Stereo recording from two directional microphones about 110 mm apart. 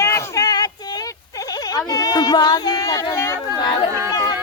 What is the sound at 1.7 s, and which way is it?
Speech, 35° left (ahead or behind).